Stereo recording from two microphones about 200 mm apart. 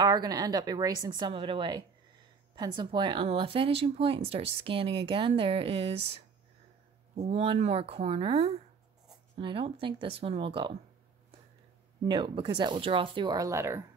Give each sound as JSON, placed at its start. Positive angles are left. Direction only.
{"t": 0.0, "sound": "speech", "side_deg": -20}
{"t": 7.2, "sound": "speech", "side_deg": -30}
{"t": 12.1, "sound": "speech", "side_deg": -20}